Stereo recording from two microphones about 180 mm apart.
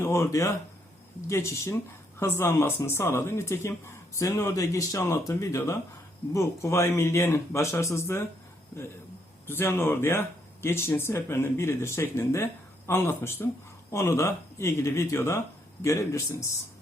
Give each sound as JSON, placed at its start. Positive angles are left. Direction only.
{"t": 0.0, "sound": "speech", "side_deg": 15}
{"t": 9.5, "sound": "speech", "side_deg": 15}